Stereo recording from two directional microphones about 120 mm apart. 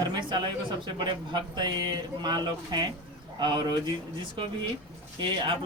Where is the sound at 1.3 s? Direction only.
35° right (ahead or behind).